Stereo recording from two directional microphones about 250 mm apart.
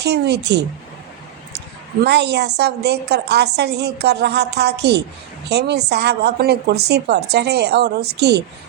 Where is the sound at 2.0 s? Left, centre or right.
Right.